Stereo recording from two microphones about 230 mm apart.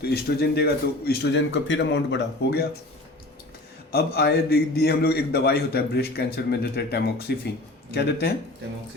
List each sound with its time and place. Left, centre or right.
0.0 s a man's voice: left
3.9 s a man's voice: left